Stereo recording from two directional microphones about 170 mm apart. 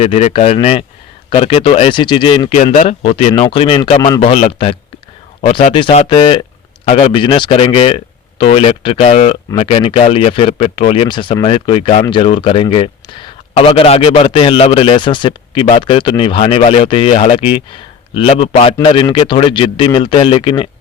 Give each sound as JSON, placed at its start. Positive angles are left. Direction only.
{"t": 0.0, "sound": "a man's voice", "side_deg": 40}